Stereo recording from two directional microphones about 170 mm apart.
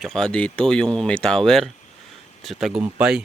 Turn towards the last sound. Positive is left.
turn(degrees=-5)  # may be behind; listen again after turning